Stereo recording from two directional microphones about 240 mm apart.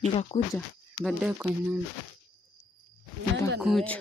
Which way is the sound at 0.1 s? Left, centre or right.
Left.